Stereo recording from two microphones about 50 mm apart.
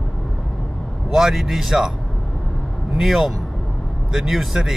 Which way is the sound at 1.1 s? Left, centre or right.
Centre.